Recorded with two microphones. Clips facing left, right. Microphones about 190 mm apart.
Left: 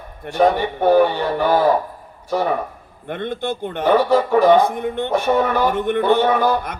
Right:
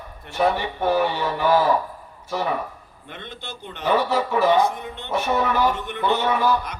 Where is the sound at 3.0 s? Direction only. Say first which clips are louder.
Left 14 dB; 55° left (ahead or behind).